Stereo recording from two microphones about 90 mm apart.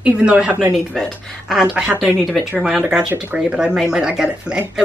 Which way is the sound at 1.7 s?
15° right (ahead or behind).